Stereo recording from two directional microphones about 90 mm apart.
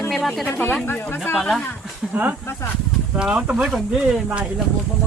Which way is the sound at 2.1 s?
15° right (ahead or behind).